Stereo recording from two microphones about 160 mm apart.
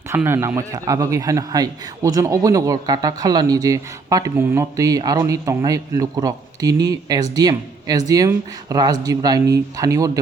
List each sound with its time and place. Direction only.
0.2 s a man's voice: 10° right (ahead or behind)